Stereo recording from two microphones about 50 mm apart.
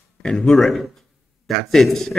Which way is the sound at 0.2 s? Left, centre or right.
Centre.